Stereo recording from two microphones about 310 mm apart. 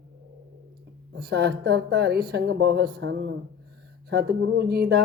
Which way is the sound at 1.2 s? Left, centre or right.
Right.